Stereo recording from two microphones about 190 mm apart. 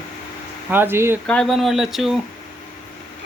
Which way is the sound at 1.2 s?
5° left (ahead or behind).